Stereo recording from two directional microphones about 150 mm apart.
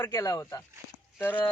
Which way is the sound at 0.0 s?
20° left (ahead or behind).